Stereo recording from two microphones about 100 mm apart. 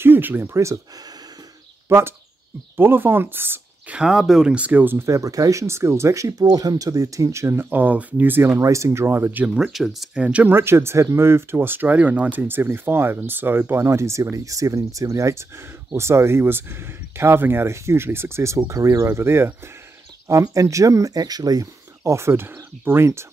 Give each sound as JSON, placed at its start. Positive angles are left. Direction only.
{"t": 0.0, "sound": "speech", "side_deg": -20}
{"t": 1.9, "sound": "speech", "side_deg": -25}
{"t": 4.1, "sound": "speech", "side_deg": -5}
{"t": 9.6, "sound": "speech", "side_deg": 0}
{"t": 10.2, "sound": "speech", "side_deg": -15}